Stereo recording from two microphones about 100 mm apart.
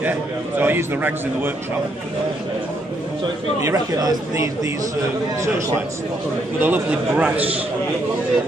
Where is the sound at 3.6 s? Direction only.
35° right (ahead or behind).